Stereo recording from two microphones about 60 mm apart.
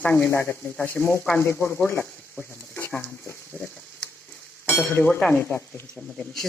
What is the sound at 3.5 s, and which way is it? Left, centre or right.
Sizzle, centre.